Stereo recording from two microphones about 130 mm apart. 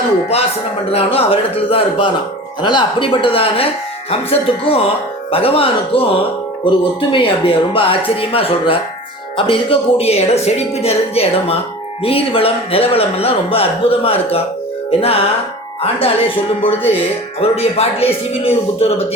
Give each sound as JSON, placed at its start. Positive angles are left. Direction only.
{"t": 0.9, "sound": "speech", "side_deg": 50}
{"t": 2.6, "sound": "speech", "side_deg": 35}
{"t": 14.8, "sound": "music", "side_deg": 50}
{"t": 15.8, "sound": "speech", "side_deg": 45}